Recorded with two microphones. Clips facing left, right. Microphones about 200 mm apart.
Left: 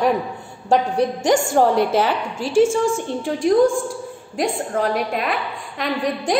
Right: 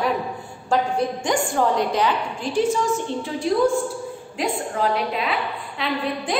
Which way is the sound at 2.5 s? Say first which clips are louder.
Left 5 dB; 45° left (ahead or behind).